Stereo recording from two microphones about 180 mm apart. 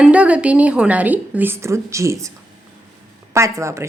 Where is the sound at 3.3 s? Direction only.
15° right (ahead or behind).